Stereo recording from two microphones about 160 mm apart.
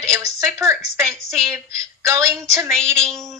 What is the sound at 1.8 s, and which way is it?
Speech, 20° right (ahead or behind).